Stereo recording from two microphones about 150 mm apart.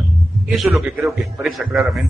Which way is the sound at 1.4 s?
Centre (ahead or behind).